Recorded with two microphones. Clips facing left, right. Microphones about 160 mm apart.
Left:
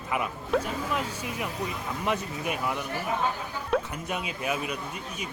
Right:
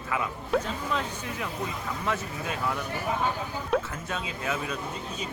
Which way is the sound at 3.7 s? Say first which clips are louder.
Even; centre (ahead or behind).